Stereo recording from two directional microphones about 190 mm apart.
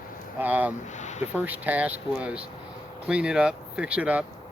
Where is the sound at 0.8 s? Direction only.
40° left (ahead or behind).